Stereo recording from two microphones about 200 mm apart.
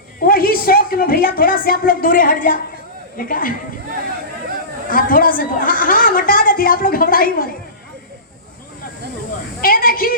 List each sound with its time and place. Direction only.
0.2 s a man's voice: 45° left (ahead or behind)
4.9 s a man's voice: 45° left (ahead or behind)
9.6 s a man's voice: 45° left (ahead or behind)